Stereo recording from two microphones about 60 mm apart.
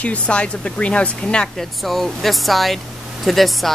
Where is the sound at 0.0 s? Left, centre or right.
Left.